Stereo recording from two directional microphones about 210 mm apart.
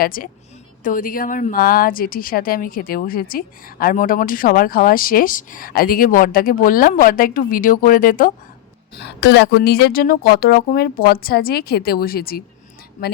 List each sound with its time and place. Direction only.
0.0 s a woman's voice: 45° left (ahead or behind)
9.0 s speech: 50° left (ahead or behind)